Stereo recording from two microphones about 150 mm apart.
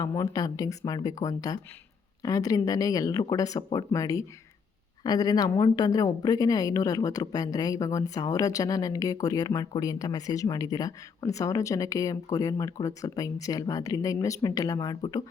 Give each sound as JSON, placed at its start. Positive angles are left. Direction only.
{"t": 0.0, "sound": "a woman's voice", "side_deg": 20}